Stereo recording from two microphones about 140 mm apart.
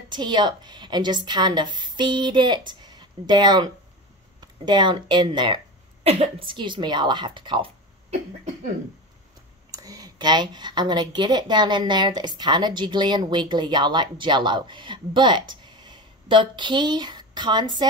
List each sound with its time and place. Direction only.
0.1 s speech: 30° right (ahead or behind)
9.7 s speech: 25° right (ahead or behind)